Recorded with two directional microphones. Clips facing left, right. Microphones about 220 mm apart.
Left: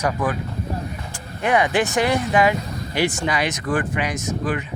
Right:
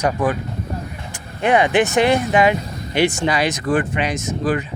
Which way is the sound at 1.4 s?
25° right (ahead or behind).